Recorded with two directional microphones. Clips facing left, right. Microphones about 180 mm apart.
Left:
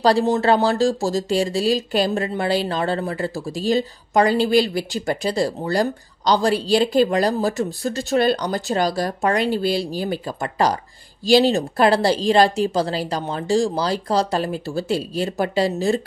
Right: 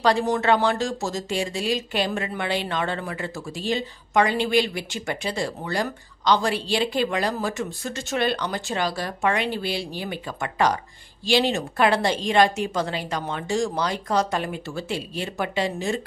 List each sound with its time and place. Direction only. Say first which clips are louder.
0.0 s speech: left 4 dB; 30° left (ahead or behind)